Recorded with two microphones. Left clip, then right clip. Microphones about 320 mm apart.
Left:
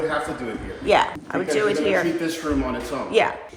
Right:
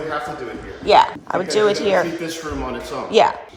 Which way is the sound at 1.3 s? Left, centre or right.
Centre.